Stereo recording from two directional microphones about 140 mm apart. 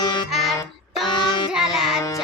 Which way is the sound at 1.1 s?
35° left (ahead or behind).